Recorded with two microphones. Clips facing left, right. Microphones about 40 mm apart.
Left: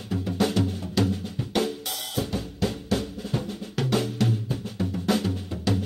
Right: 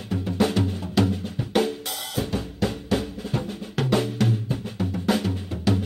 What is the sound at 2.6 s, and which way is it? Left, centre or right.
Drum, centre.